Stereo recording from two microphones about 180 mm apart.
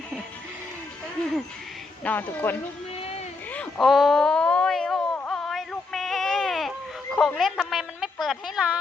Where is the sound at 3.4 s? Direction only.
10° left (ahead or behind).